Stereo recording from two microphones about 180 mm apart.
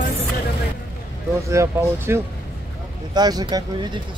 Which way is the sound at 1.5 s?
15° right (ahead or behind).